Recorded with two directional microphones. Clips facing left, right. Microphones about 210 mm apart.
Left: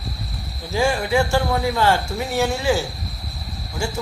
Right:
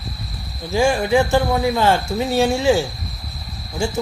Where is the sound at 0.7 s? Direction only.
15° right (ahead or behind).